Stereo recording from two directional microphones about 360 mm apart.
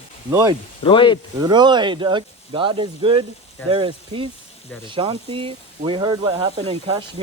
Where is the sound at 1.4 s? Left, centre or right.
Centre.